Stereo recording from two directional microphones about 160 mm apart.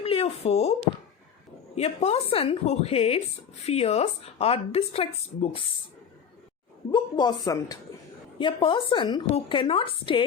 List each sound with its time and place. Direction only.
0.0 s speech: 35° left (ahead or behind)
1.7 s speech: 40° left (ahead or behind)
6.9 s a woman's voice: 25° left (ahead or behind)